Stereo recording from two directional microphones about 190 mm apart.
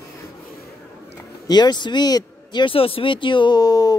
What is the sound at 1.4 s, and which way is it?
Speech, 20° left (ahead or behind).